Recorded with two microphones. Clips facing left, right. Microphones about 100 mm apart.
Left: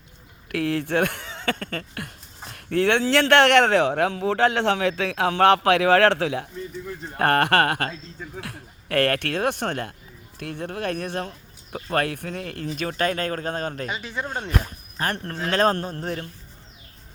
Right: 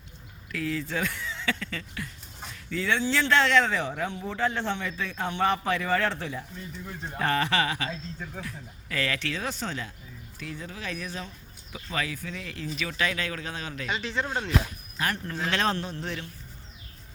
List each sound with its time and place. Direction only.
0.5 s speech: 65° left (ahead or behind); by 6.5 s 85° left
7.2 s speech: 60° left (ahead or behind)
8.4 s speech: 70° left (ahead or behind); by 13.9 s 45° left (ahead or behind)
13.9 s speech: 10° left (ahead or behind)
14.9 s speech: 40° left (ahead or behind)